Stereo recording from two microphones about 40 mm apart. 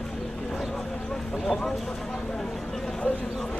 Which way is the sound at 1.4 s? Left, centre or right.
Centre.